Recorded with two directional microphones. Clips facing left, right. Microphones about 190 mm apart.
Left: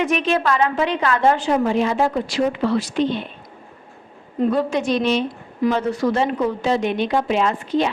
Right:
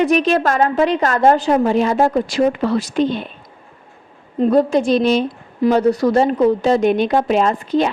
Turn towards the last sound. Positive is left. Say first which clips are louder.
# right 3 dB
turn(degrees=-40)  # may be behind; listen again after turning